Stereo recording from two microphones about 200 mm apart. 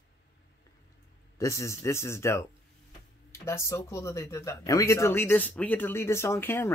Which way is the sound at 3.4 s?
15° left (ahead or behind).